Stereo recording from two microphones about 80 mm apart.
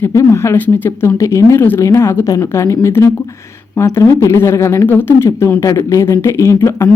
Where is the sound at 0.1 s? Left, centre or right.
Left.